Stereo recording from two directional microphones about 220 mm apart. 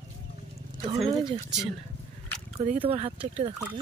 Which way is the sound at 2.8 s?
25° right (ahead or behind).